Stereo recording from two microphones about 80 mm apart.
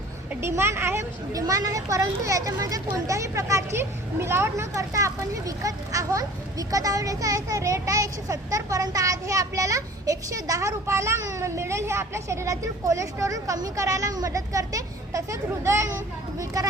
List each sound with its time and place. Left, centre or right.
0.4 s a woman's voice: right
1.3 s speech: right